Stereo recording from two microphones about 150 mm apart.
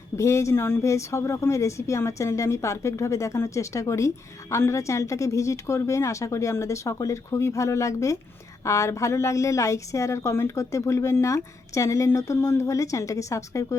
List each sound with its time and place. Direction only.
0.2 s a woman's voice: 20° left (ahead or behind)